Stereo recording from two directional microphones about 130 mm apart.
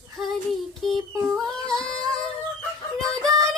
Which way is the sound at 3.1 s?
5° left (ahead or behind).